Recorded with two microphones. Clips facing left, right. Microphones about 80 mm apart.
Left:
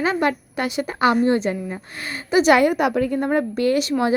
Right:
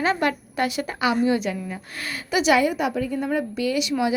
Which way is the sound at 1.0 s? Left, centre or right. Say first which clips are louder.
Left 4 dB; left.